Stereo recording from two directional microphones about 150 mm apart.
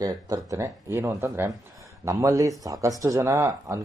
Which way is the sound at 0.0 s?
20° right (ahead or behind).